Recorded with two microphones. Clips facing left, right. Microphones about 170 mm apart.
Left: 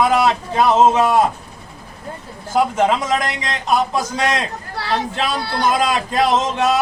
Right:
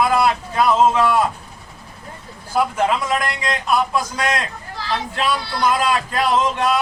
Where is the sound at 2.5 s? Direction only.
25° left (ahead or behind).